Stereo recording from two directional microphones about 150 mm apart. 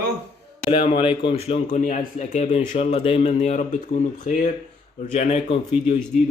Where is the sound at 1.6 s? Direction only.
55° left (ahead or behind).